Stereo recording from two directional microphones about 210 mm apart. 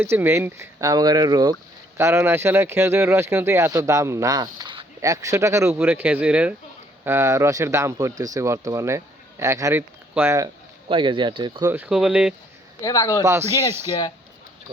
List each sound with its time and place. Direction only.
0.0 s speech: 10° right (ahead or behind)
11.7 s speech: 5° right (ahead or behind)
12.8 s speech: 15° left (ahead or behind)